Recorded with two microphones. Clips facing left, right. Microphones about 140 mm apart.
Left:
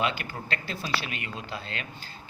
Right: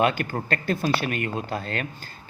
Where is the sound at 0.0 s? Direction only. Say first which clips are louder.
Right 7 dB; 50° right (ahead or behind).